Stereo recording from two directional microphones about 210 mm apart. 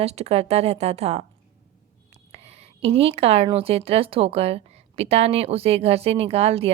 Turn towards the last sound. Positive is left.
turn(degrees=-30)  # may be behind; listen again after turning